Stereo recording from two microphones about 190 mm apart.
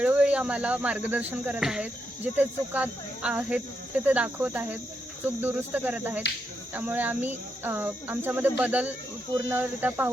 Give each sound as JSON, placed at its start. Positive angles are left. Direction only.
{"t": 0.0, "sound": "speech", "side_deg": -5}